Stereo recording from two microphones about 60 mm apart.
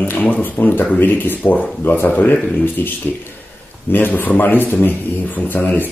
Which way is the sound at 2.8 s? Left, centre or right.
Left.